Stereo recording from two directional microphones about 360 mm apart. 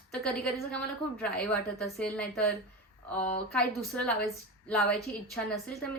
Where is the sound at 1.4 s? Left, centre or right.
Centre.